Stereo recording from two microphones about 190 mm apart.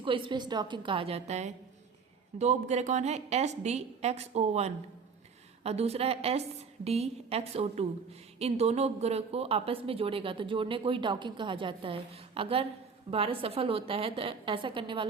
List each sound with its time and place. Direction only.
0.0 s a woman's voice: 25° right (ahead or behind)